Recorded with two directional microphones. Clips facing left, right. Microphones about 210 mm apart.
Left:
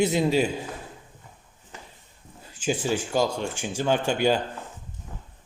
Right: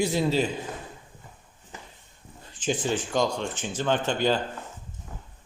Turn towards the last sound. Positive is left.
turn(degrees=10)  # may be behind; listen again after turning